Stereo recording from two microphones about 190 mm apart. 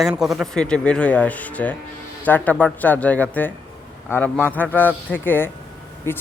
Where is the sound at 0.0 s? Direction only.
Centre (ahead or behind).